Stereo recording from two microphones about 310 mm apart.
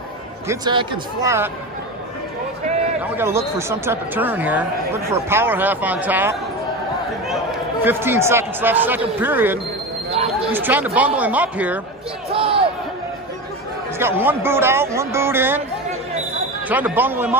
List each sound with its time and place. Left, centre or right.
0.5 s speech: centre
3.0 s speech: centre
7.8 s speech: centre
10.1 s a sound: centre
10.5 s speech: centre
12.3 s speech: centre
13.9 s speech: centre
16.6 s speech: centre